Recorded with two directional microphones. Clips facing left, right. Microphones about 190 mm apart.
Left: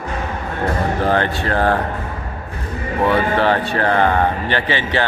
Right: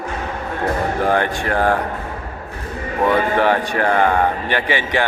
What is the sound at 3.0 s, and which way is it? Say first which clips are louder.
Speech: even; 15° right (ahead or behind).